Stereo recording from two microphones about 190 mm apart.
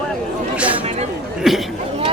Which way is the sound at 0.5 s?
5° right (ahead or behind).